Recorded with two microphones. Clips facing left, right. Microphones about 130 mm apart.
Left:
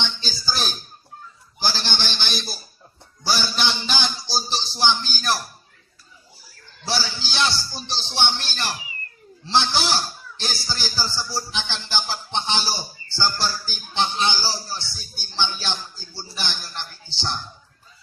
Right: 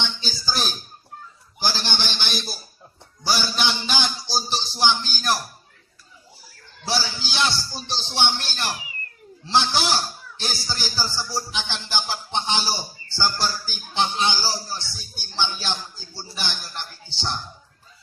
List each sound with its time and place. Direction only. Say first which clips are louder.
0.0 s a man's voice: even; 15° right (ahead or behind)
1.5 s a sound: even; 15° right (ahead or behind)
3.2 s a man's voice: even; 15° right (ahead or behind)
6.8 s speech: right 1 dB; 15° right (ahead or behind)